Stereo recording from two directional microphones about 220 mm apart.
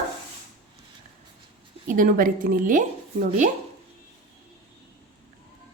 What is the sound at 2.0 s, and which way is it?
Speech, 40° right (ahead or behind).